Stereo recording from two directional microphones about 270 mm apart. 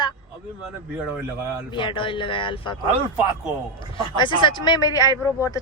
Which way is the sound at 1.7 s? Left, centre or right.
Centre.